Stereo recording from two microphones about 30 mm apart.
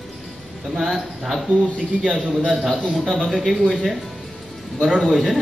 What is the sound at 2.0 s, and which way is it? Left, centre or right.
Speech, right.